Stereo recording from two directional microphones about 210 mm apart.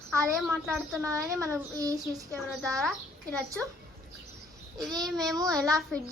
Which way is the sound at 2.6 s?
5° left (ahead or behind).